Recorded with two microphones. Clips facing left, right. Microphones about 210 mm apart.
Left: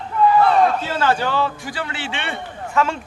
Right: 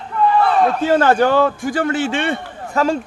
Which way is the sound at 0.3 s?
Centre (ahead or behind).